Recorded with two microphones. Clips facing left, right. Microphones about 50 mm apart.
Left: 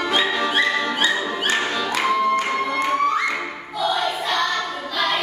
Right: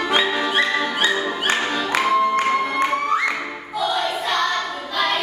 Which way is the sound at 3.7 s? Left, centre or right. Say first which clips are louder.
Even; centre.